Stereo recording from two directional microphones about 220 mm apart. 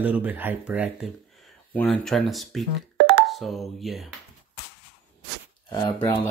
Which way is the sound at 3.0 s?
50° right (ahead or behind).